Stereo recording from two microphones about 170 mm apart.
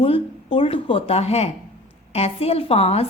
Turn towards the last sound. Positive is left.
turn(degrees=35)  # may be behind; listen again after turning